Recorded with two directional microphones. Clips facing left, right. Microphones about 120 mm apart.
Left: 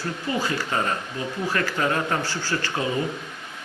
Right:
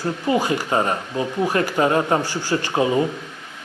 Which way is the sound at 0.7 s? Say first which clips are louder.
Right 5 dB; 30° right (ahead or behind).